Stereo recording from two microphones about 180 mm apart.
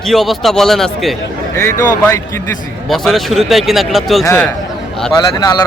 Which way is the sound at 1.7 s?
15° left (ahead or behind).